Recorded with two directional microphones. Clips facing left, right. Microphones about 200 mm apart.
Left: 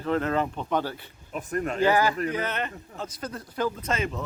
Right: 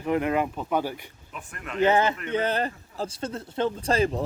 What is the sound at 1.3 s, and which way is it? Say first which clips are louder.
Speech: left 9 dB; 40° left (ahead or behind).